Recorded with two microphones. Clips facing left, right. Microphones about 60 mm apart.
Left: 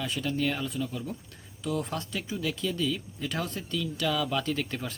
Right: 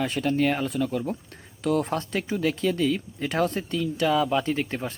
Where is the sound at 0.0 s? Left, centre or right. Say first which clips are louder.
Right 6 dB; right.